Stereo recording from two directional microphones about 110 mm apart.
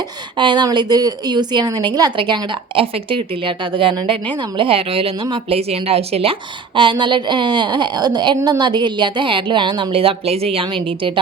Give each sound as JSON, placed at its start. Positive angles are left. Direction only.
{"t": 0.3, "sound": "a woman's voice", "side_deg": -45}
{"t": 6.7, "sound": "a woman's voice", "side_deg": -50}